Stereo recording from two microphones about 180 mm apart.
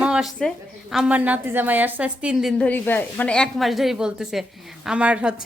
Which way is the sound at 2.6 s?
10° left (ahead or behind).